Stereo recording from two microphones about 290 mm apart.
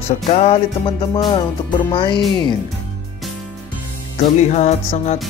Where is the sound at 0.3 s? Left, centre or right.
Left.